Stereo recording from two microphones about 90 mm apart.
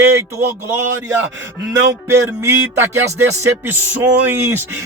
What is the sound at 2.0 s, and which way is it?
Speech, 30° right (ahead or behind).